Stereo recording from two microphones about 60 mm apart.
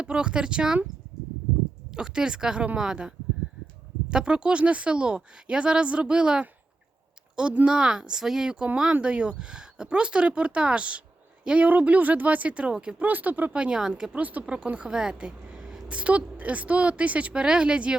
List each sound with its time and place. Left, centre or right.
0.0 s speech: centre
1.9 s speech: centre
4.1 s speech: centre
7.5 s a woman's voice: centre
13.0 s a woman's voice: right
13.5 s a woman's voice: centre